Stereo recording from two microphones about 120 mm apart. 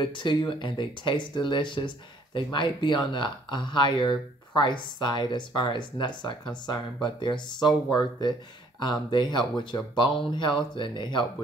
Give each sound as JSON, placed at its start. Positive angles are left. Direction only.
{"t": 0.0, "sound": "speech", "side_deg": 40}